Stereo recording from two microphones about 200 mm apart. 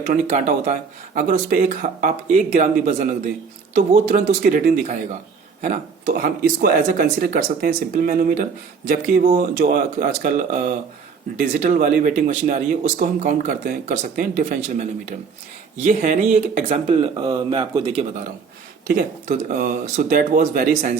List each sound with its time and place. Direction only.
0.0 s speech: 40° right (ahead or behind)
18.9 s speech: 45° right (ahead or behind)